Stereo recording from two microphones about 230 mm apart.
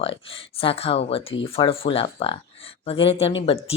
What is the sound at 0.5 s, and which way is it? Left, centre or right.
A woman's voice, left.